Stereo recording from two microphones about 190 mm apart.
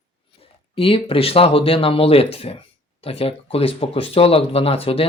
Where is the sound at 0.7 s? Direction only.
30° left (ahead or behind).